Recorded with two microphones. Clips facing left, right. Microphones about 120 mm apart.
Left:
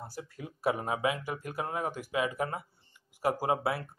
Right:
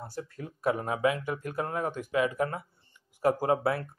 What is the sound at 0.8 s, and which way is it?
Speech, 20° left (ahead or behind).